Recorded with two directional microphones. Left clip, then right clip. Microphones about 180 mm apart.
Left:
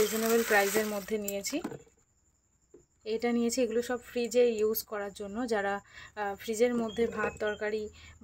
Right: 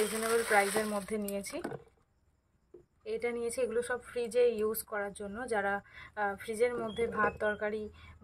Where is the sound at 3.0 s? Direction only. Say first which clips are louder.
Left 4 dB; 40° left (ahead or behind).